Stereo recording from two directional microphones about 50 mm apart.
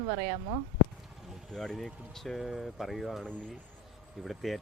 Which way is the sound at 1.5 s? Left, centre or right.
Centre.